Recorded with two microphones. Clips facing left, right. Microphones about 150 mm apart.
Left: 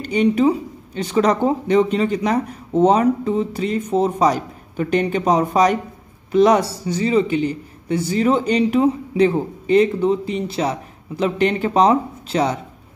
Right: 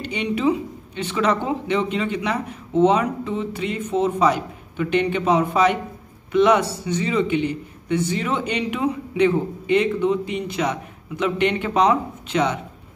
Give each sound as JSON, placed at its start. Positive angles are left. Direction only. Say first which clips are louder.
{"t": 0.0, "sound": "speech", "louder": "left 6 dB", "side_deg": 45}